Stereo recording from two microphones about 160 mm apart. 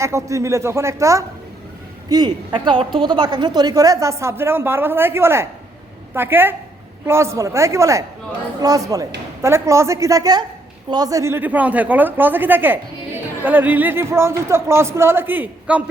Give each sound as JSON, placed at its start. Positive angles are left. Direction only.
{"t": 0.0, "sound": "a woman's voice", "side_deg": -20}